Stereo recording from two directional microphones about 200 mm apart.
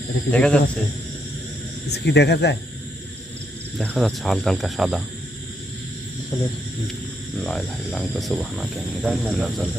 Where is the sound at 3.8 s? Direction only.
Centre (ahead or behind).